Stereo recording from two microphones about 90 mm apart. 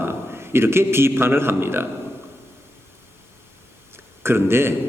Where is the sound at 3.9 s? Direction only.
25° right (ahead or behind).